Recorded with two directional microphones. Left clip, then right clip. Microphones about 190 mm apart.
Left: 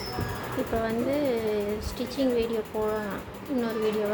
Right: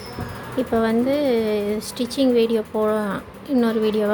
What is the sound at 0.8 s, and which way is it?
A woman's voice, 50° right (ahead or behind).